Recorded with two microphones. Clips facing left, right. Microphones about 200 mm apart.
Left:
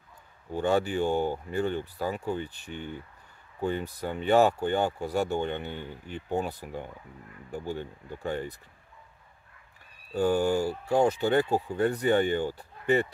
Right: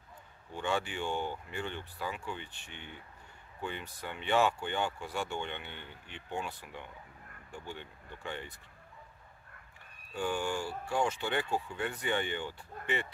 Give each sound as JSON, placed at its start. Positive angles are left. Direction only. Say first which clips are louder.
{"t": 0.5, "sound": "speech", "louder": "left 9 dB", "side_deg": 40}
{"t": 10.1, "sound": "speech", "louder": "left 9 dB", "side_deg": 40}